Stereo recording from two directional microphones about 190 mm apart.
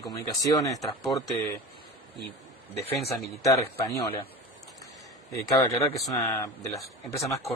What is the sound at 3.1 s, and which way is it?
Speech, 15° left (ahead or behind).